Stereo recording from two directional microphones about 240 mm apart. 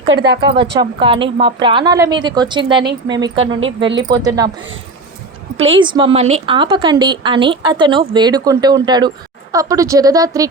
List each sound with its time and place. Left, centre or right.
0.1 s speech: right
0.8 s a woman's voice: right
5.5 s a woman's voice: right